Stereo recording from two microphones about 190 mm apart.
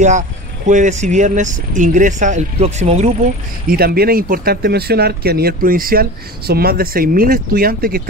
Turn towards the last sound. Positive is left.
turn(degrees=-50)  # may be behind; listen again after turning